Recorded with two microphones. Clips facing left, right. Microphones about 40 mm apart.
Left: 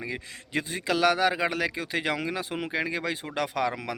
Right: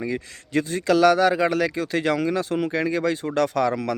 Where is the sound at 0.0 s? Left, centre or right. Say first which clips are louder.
Right 7 dB; centre.